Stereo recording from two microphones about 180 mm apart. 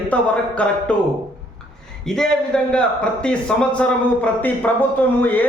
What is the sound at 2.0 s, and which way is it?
A man's voice, 5° left (ahead or behind).